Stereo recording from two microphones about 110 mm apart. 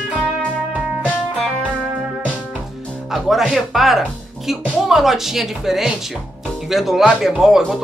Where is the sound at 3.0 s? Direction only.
5° right (ahead or behind).